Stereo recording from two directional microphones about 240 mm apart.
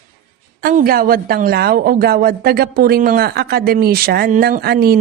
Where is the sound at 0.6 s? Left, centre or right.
Right.